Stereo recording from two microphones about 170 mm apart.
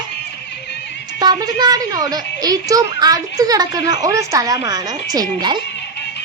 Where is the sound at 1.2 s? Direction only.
25° right (ahead or behind).